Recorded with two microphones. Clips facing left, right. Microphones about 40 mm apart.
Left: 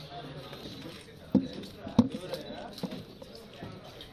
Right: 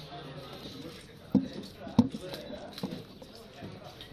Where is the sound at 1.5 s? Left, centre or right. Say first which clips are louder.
Even; left.